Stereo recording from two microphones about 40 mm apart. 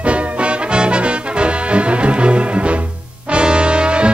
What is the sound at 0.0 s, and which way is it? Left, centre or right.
Music, right.